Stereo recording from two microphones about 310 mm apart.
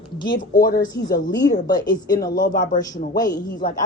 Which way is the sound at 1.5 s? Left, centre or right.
Centre.